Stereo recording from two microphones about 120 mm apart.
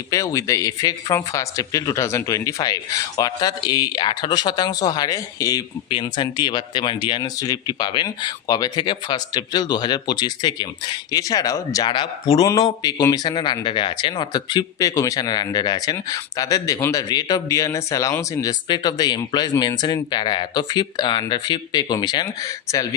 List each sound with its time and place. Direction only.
0.1 s a man's voice: 30° left (ahead or behind)
5.9 s a man's voice: 40° left (ahead or behind)